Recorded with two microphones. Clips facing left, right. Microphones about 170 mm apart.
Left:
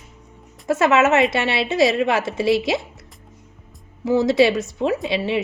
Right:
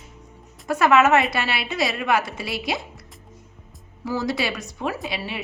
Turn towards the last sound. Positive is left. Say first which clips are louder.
# left 9 dB
turn(degrees=25)  # may be behind; listen again after turning